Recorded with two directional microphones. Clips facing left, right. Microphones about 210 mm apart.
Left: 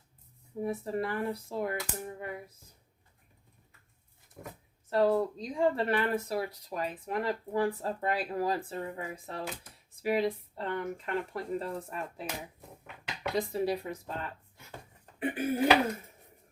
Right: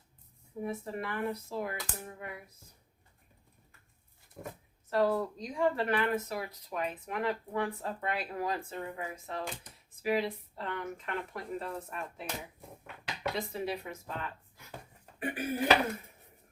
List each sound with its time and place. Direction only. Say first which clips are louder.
0.6 s speech: left 4 dB; 35° left (ahead or behind)
4.9 s speech: left 3 dB; 25° left (ahead or behind)
13.3 s speech: left 8 dB; 35° left (ahead or behind)